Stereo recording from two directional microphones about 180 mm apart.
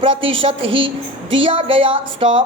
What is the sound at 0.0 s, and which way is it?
A woman's voice, 30° right (ahead or behind).